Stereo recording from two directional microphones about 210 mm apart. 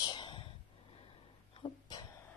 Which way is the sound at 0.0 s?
20° left (ahead or behind).